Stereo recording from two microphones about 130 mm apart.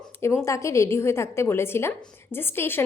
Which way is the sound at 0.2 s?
20° left (ahead or behind).